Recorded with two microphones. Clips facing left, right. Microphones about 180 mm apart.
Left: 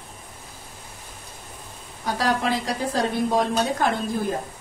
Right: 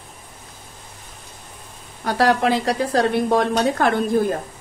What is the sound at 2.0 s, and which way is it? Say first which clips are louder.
A woman's voice: right 6 dB; 65° right (ahead or behind).